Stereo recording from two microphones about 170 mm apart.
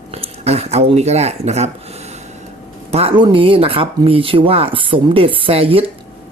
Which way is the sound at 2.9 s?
35° right (ahead or behind).